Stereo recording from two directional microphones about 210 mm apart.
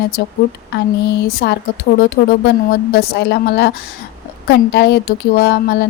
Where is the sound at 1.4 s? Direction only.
55° left (ahead or behind).